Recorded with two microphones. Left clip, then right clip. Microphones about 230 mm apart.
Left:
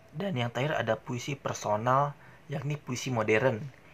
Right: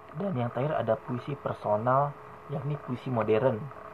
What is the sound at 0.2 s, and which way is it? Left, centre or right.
Speech, left.